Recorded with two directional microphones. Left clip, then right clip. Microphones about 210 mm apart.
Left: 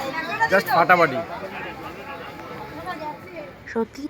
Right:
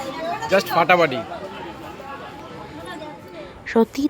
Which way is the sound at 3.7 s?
30° right (ahead or behind).